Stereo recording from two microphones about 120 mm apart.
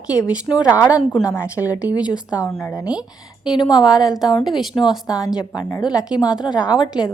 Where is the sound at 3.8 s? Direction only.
5° right (ahead or behind).